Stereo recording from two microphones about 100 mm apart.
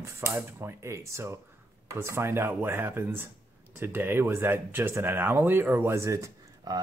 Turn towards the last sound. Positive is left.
turn(degrees=-30)  # may be behind; listen again after turning